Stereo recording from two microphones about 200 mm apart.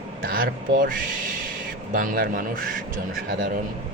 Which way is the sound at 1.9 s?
45° right (ahead or behind).